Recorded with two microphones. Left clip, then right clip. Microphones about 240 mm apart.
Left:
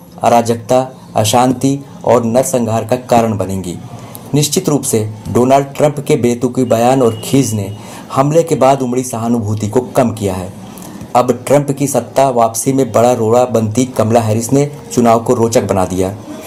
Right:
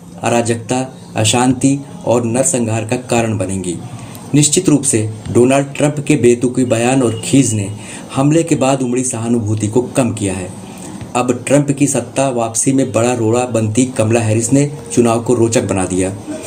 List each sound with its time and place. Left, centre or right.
0.2 s speech: left
11.4 s speech: left